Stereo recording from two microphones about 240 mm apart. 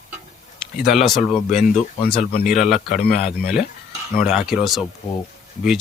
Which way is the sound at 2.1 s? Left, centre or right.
Left.